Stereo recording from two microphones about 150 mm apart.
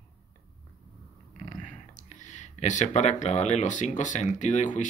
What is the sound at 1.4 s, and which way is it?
Speech, 55° left (ahead or behind).